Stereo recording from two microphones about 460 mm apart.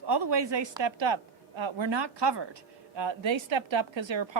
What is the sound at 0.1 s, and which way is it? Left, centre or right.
A woman's voice, right.